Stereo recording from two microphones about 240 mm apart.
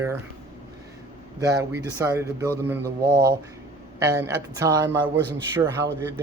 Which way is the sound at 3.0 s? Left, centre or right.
Right.